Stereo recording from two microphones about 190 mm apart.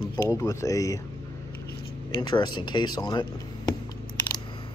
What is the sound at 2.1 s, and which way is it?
Speech, 20° left (ahead or behind).